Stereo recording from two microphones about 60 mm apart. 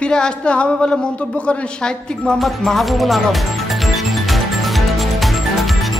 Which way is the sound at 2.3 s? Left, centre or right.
Centre.